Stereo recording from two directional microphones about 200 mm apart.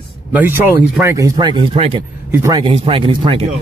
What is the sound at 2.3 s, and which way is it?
Speech, 15° right (ahead or behind).